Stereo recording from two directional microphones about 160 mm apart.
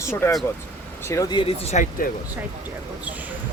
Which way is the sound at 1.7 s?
55° left (ahead or behind).